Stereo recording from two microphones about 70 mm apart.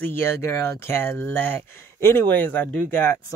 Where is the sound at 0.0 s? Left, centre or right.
Left.